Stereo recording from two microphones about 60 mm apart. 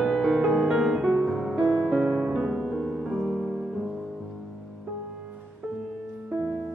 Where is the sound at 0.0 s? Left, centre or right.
Centre.